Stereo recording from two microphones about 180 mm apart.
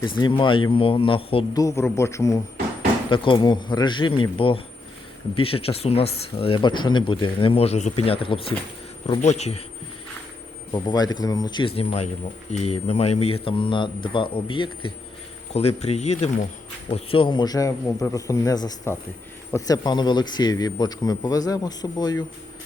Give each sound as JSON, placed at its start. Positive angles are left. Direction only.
{"t": 0.2, "sound": "speech", "side_deg": 25}
{"t": 1.5, "sound": "a man's voice", "side_deg": 20}
{"t": 10.7, "sound": "speech", "side_deg": 25}